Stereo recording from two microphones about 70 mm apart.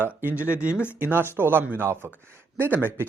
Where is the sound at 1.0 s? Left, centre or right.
Right.